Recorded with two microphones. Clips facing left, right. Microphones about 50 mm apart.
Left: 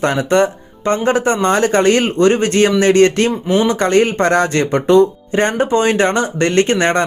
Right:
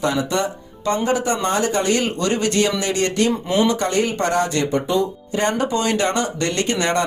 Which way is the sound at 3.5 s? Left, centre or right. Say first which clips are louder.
Left 4 dB; left.